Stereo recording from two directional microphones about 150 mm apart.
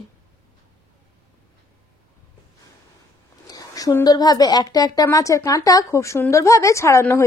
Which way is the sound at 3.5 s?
25° left (ahead or behind).